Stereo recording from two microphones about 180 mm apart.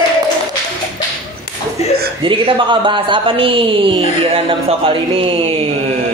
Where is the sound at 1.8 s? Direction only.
35° left (ahead or behind).